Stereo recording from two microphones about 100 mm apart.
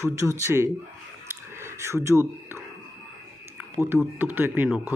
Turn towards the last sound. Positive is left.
turn(degrees=-20)  # may be behind; listen again after turning